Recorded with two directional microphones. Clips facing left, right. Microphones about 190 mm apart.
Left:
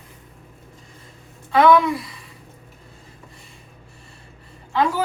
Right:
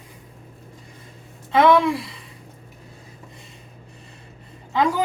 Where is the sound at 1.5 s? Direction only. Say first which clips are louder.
Left 1 dB; 25° right (ahead or behind).